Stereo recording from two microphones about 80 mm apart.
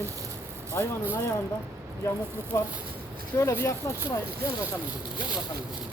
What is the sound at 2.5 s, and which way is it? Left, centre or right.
Speech, left.